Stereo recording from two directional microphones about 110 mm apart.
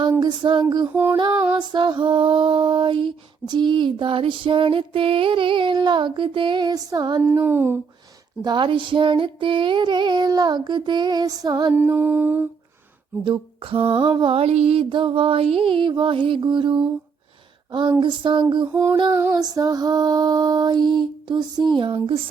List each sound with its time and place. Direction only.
0.2 s female singing: 45° right (ahead or behind)
7.4 s speech: 20° right (ahead or behind)
8.4 s female singing: 40° right (ahead or behind)
11.7 s mantra: 15° right (ahead or behind)
13.2 s female singing: 50° right (ahead or behind)
17.7 s speech: 45° right (ahead or behind)
18.0 s female singing: 50° right (ahead or behind)
18.7 s speech: 20° right (ahead or behind)
19.1 s female singing: 25° right (ahead or behind); by 22.2 s 50° right (ahead or behind)